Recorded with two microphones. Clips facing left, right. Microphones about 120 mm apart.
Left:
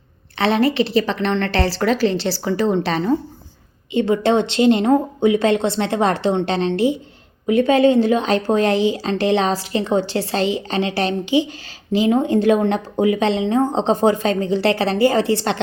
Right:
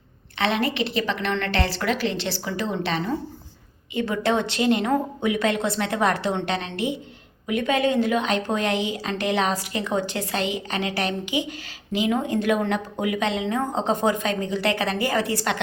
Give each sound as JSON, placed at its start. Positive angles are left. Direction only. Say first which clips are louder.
{"t": 0.3, "sound": "a woman's voice", "louder": "left 7 dB", "side_deg": 35}
{"t": 3.9, "sound": "a woman's voice", "louder": "left 7 dB", "side_deg": 25}